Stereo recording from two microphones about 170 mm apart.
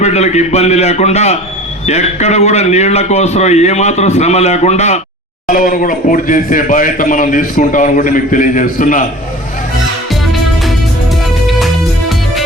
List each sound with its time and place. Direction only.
0.0 s a man's voice: 40° left (ahead or behind)
5.5 s a man's voice: 50° left (ahead or behind)
11.4 s music: centre (ahead or behind)